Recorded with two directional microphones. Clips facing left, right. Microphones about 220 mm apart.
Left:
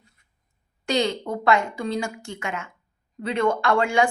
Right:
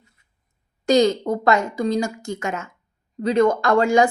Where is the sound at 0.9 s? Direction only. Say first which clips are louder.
Right 7 dB; 40° right (ahead or behind).